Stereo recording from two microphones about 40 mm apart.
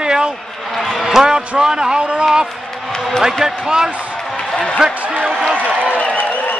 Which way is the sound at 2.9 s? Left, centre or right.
Centre.